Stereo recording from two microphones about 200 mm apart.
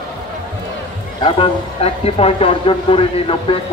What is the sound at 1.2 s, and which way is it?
Speech, 30° left (ahead or behind).